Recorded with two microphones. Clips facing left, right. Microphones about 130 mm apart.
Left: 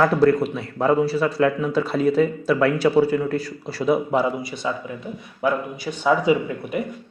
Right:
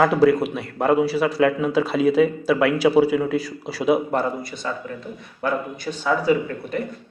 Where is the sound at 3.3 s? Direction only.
90° right.